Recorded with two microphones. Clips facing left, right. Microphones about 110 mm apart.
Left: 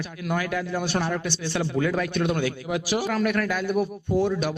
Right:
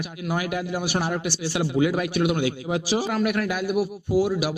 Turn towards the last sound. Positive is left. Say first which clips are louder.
# right 1 dB
turn(degrees=-5)  # may be behind; listen again after turning